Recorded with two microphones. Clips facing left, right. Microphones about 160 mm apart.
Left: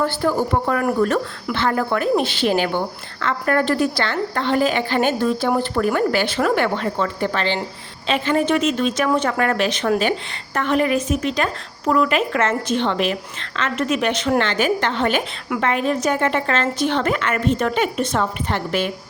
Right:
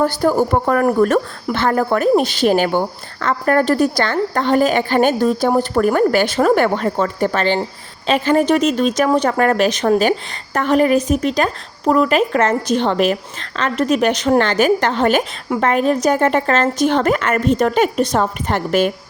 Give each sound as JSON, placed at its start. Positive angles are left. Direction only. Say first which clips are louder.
{"t": 0.0, "sound": "a woman's voice", "louder": "right 4 dB", "side_deg": -40}